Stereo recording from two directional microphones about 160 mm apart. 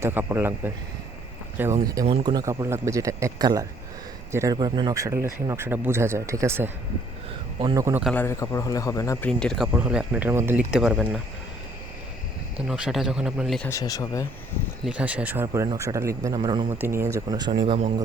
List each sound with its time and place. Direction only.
0.0 s speech: 15° right (ahead or behind)
2.0 s a man's voice: 30° right (ahead or behind)
4.5 s speech: 30° right (ahead or behind)
8.1 s speech: 15° left (ahead or behind)
9.4 s speech: 5° left (ahead or behind)
9.7 s speech: 10° right (ahead or behind)
12.6 s speech: 5° right (ahead or behind)
13.7 s speech: 20° left (ahead or behind)
14.8 s speech: 10° right (ahead or behind); by 16.7 s 25° right (ahead or behind)
16.7 s speech: 15° right (ahead or behind)